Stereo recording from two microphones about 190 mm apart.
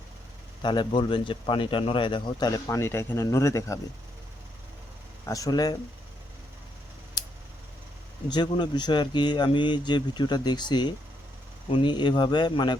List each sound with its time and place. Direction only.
0.6 s a man's voice: 25° left (ahead or behind)
5.3 s a man's voice: 20° left (ahead or behind)
8.3 s a man's voice: 25° left (ahead or behind)